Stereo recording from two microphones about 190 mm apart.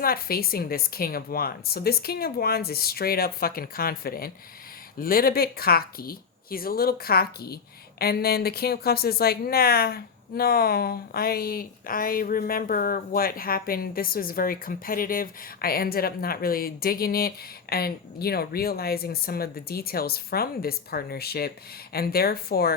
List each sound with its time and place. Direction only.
0.0 s a woman's voice: 50° left (ahead or behind)